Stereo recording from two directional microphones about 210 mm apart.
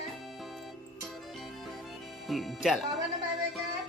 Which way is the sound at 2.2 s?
Centre (ahead or behind).